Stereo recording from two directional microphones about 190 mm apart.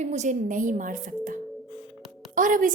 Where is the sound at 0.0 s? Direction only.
40° right (ahead or behind).